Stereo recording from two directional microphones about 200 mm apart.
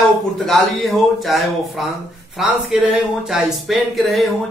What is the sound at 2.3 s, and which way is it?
Speech, centre (ahead or behind).